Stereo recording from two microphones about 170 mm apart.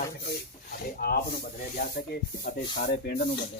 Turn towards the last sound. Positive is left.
turn(degrees=60)  # may be behind; listen again after turning